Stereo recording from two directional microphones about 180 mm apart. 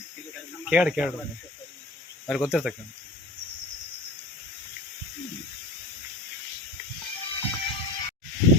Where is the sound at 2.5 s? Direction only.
5° right (ahead or behind).